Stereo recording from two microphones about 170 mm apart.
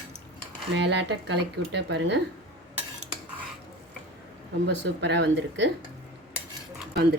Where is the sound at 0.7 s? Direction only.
90° right.